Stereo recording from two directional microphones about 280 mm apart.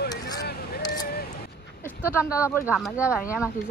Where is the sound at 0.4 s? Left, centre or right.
Left.